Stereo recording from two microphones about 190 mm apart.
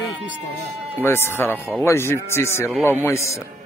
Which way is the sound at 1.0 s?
15° left (ahead or behind).